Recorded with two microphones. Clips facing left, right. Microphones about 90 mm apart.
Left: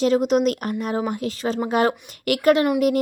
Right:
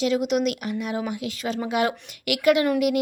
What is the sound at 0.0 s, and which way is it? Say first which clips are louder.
Speech: left 4 dB; 40° left (ahead or behind).